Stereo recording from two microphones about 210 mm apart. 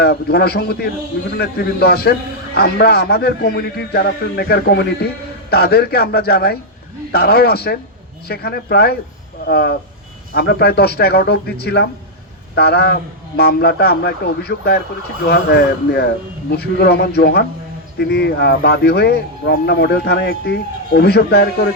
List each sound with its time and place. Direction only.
0.0 s speech: 50° left (ahead or behind)